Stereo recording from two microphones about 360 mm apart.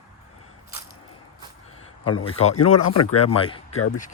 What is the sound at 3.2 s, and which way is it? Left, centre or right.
Speech, centre.